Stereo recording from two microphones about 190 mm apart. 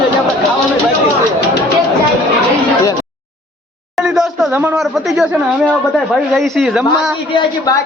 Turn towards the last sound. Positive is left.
turn(degrees=0)  # may be behind; listen again after turning